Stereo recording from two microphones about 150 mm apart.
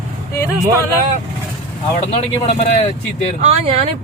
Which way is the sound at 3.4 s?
45° right (ahead or behind).